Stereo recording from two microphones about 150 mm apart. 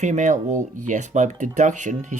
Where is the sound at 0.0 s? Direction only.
55° right (ahead or behind).